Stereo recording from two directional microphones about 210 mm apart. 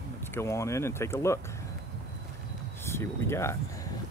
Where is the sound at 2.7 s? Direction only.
10° left (ahead or behind).